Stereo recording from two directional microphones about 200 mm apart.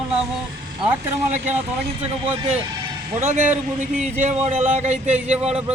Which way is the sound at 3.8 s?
35° right (ahead or behind).